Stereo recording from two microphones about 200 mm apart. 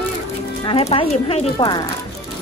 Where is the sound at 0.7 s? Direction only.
30° left (ahead or behind).